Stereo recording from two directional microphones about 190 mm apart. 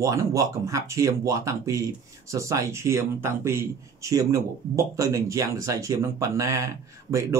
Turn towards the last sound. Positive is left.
turn(degrees=-15)  # may be behind; listen again after turning